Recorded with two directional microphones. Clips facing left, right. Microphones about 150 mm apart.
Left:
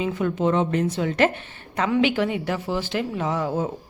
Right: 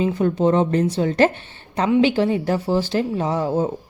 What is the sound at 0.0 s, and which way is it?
A woman's voice, 35° right (ahead or behind).